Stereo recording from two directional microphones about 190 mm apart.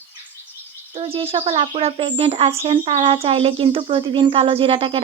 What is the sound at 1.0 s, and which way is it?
Speech, 30° right (ahead or behind).